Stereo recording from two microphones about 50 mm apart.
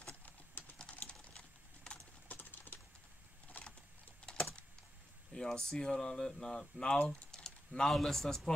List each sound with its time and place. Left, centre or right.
0.9 s typing: centre
2.2 s typing: left
3.6 s vehicle: left
5.3 s speech: centre
7.2 s typing: centre
7.9 s speech: centre